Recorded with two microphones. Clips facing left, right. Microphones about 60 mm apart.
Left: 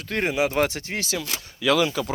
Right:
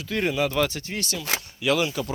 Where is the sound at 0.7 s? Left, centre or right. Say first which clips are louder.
Left 2 dB; left.